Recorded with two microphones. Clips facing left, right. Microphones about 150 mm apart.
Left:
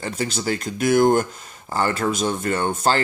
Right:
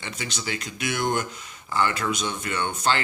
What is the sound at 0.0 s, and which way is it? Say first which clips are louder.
Speech: left 8 dB; 40° left (ahead or behind).